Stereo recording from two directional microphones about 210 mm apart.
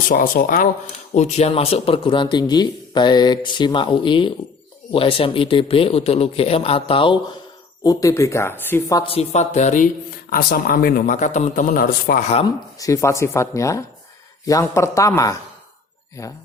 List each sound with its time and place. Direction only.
0.1 s speech: 40° left (ahead or behind); by 7.2 s 25° left (ahead or behind)
7.9 s speech: 15° left (ahead or behind)
9.1 s speech: 30° left (ahead or behind)
12.8 s speech: 15° left (ahead or behind)